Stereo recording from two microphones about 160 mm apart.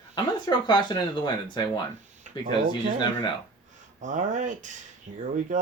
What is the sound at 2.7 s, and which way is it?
Speech, 30° left (ahead or behind).